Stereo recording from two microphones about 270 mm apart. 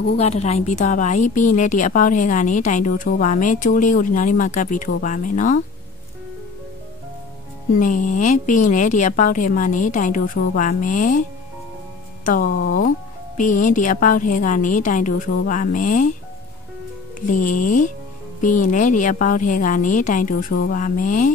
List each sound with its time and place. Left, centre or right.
0.2 s a woman's voice: left
7.8 s a woman's voice: left
12.3 s a woman's voice: left
17.3 s a woman's voice: left